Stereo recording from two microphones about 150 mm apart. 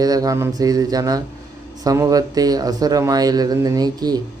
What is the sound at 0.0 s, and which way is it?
Speech, 25° right (ahead or behind).